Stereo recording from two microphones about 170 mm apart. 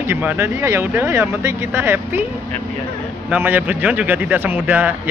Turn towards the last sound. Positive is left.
turn(degrees=-10)  # may be behind; listen again after turning